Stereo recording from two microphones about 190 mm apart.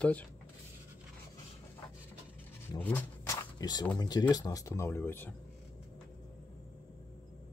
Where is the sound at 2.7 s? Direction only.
10° left (ahead or behind).